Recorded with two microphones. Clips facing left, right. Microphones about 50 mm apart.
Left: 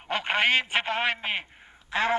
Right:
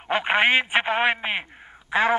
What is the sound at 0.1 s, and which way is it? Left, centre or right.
Speech, centre.